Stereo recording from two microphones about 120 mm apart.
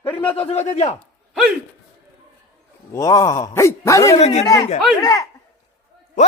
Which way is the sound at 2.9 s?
30° left (ahead or behind).